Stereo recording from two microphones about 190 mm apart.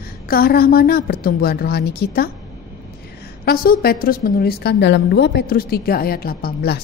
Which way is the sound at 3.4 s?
50° left (ahead or behind).